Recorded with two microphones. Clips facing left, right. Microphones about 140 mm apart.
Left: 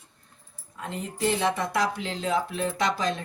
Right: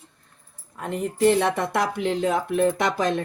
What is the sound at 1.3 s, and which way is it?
Speech, 60° right (ahead or behind).